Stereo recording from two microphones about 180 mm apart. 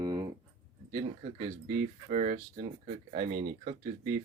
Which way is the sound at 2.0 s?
35° right (ahead or behind).